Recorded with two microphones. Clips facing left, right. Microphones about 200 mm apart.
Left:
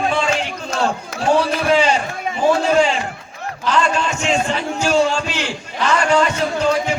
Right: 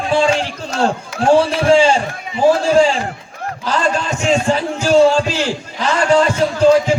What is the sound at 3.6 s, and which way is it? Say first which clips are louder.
Speech: even; 35° right (ahead or behind).